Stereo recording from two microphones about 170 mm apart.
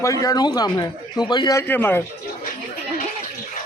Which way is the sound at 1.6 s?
10° left (ahead or behind).